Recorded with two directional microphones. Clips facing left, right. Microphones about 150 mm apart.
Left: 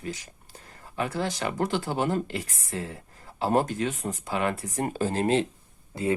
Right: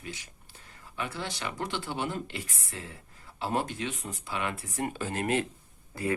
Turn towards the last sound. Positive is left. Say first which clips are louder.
# left 4 dB
turn(degrees=20)  # may be behind; listen again after turning